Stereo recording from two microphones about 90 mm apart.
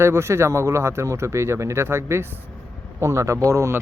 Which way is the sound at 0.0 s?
30° right (ahead or behind).